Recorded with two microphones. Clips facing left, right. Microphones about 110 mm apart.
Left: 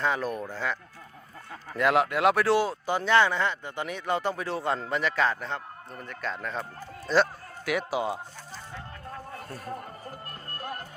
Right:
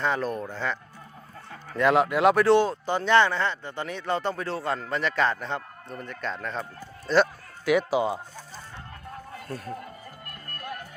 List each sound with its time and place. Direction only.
0.0 s speech: 10° left (ahead or behind)
4.9 s speech: 5° left (ahead or behind)
10.2 s music: 30° left (ahead or behind)